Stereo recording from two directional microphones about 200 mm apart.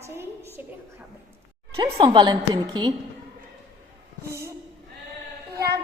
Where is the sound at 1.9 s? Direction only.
25° right (ahead or behind).